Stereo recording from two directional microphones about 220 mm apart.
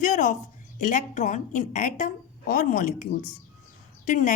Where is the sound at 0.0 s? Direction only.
35° left (ahead or behind).